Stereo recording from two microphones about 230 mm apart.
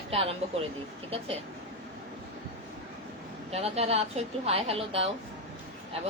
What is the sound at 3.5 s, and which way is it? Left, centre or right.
A woman's voice, right.